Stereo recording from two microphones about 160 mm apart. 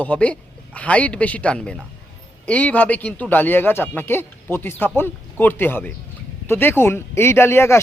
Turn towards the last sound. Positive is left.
turn(degrees=15)  # may be behind; listen again after turning